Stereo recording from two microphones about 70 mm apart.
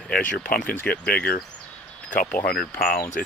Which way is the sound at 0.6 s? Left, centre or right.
Left.